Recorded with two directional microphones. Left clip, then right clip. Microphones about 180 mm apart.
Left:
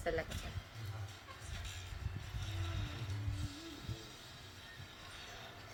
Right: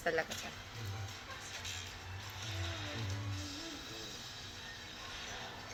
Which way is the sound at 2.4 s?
25° left (ahead or behind).